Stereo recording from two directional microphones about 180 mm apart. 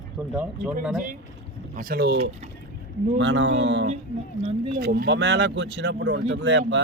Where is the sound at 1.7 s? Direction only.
55° right (ahead or behind).